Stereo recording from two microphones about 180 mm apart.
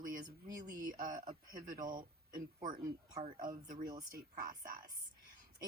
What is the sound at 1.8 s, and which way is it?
Speech, 25° right (ahead or behind).